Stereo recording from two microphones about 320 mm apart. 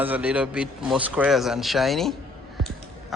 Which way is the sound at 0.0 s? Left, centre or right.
Centre.